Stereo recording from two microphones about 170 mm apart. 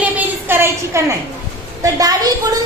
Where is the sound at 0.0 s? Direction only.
10° right (ahead or behind).